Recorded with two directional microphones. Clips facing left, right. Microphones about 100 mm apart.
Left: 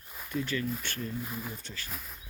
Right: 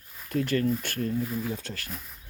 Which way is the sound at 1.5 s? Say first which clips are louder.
Right 8 dB; 80° right.